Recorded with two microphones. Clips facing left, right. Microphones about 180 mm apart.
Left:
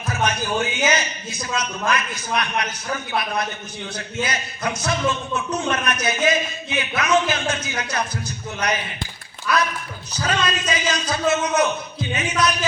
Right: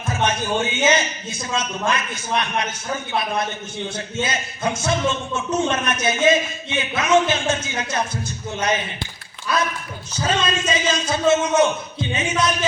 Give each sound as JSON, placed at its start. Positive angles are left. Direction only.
{"t": 0.1, "sound": "speech", "side_deg": -25}